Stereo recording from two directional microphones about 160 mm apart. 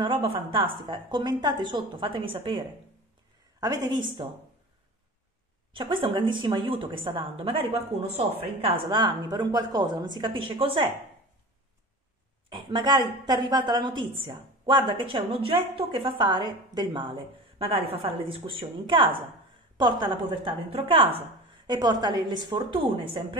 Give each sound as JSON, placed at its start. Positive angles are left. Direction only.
{"t": 0.0, "sound": "a woman's voice", "side_deg": -30}
{"t": 3.6, "sound": "a woman's voice", "side_deg": -25}
{"t": 5.7, "sound": "a woman's voice", "side_deg": -30}
{"t": 12.4, "sound": "a woman's voice", "side_deg": -30}
{"t": 21.6, "sound": "a woman's voice", "side_deg": -25}